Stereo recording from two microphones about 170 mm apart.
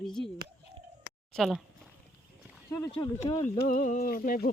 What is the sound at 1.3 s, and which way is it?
Speech, centre (ahead or behind).